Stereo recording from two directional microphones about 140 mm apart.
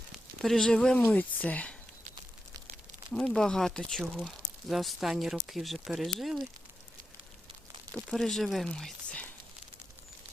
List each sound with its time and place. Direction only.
0.4 s speech: 5° left (ahead or behind)
3.1 s speech: 5° left (ahead or behind)
7.9 s speech: centre (ahead or behind)